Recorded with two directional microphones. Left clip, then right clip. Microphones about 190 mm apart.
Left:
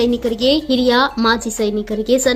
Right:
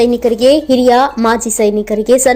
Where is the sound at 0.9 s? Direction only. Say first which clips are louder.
Right 4 dB; centre (ahead or behind).